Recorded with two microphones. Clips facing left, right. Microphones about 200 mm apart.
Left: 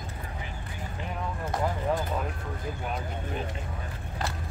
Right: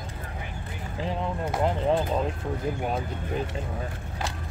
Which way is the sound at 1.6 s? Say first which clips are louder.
Right 5 dB; 25° right (ahead or behind).